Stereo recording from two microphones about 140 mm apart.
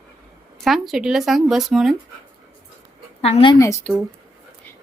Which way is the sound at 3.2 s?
45° left (ahead or behind).